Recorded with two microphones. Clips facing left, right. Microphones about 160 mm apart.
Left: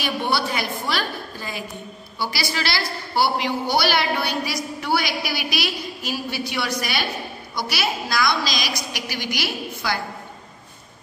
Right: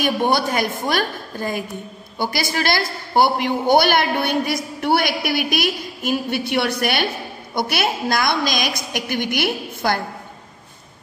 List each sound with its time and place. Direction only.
0.0 s a woman's voice: 45° right (ahead or behind)